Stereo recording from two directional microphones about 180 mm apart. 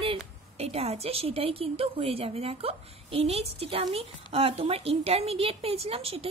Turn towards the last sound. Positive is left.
turn(degrees=-30)  # may be behind; listen again after turning